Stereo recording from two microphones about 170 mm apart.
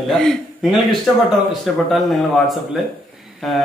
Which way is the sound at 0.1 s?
Centre (ahead or behind).